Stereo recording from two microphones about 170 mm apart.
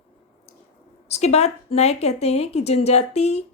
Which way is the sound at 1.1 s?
40° left (ahead or behind).